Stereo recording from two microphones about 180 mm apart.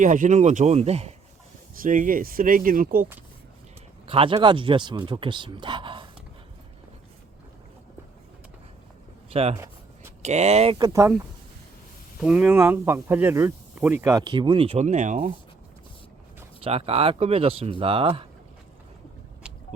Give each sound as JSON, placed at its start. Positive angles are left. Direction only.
{"t": 0.0, "sound": "speech", "side_deg": -45}
{"t": 1.8, "sound": "speech", "side_deg": -50}
{"t": 4.0, "sound": "speech", "side_deg": -30}
{"t": 9.3, "sound": "speech", "side_deg": -35}
{"t": 10.8, "sound": "speech", "side_deg": -20}
{"t": 12.2, "sound": "speech", "side_deg": -5}
{"t": 16.6, "sound": "speech", "side_deg": -35}